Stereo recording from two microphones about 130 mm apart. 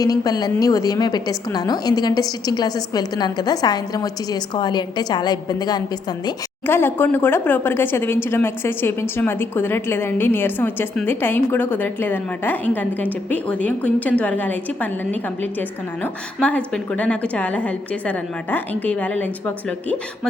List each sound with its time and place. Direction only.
0.0 s a woman's voice: 30° left (ahead or behind)
6.7 s speech: 15° left (ahead or behind)